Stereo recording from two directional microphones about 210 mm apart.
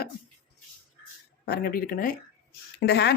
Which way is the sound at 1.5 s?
45° left (ahead or behind).